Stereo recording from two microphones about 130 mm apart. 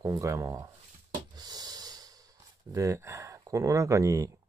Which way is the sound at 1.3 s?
30° right (ahead or behind).